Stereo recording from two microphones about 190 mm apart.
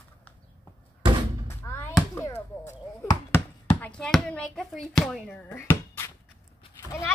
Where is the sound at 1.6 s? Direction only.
15° left (ahead or behind).